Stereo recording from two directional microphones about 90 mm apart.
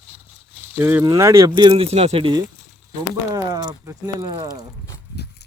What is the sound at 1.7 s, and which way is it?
Speech, 90° right.